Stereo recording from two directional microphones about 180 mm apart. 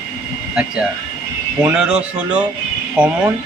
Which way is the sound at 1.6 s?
5° right (ahead or behind).